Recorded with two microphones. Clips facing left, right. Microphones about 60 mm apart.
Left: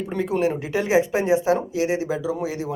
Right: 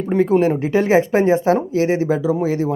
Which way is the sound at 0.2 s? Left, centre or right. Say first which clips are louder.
Right 7 dB; right.